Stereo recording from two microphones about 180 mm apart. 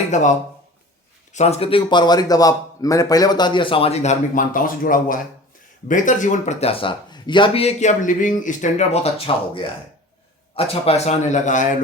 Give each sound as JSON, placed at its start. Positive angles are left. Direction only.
{"t": 0.1, "sound": "a man's voice", "side_deg": 40}
{"t": 10.5, "sound": "speech", "side_deg": 35}